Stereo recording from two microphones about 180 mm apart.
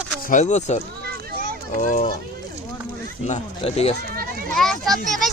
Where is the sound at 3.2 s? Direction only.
35° left (ahead or behind).